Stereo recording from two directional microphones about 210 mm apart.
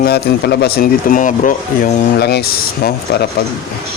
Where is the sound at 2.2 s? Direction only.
50° left (ahead or behind).